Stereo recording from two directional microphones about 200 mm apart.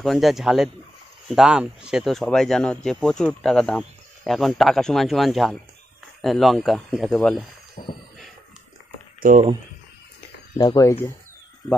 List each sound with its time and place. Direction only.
0.0 s speech: centre (ahead or behind)
7.8 s music: 40° left (ahead or behind)
9.2 s speech: 45° right (ahead or behind)
10.6 s speech: 15° left (ahead or behind)